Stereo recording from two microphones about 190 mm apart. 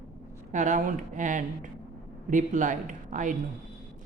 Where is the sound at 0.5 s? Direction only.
40° right (ahead or behind).